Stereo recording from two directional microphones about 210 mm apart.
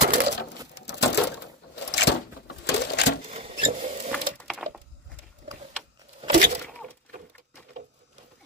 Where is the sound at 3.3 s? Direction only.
30° right (ahead or behind).